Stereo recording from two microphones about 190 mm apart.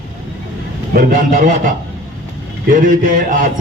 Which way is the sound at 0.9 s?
45° right (ahead or behind).